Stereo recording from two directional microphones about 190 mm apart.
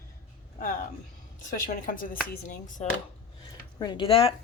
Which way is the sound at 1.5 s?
40° left (ahead or behind).